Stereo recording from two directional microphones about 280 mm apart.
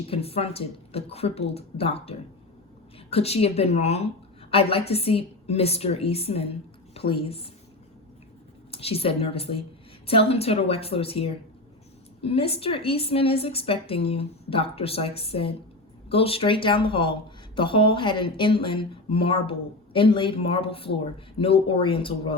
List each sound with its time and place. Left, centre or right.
0.1 s a woman's voice: left
8.7 s a woman's voice: left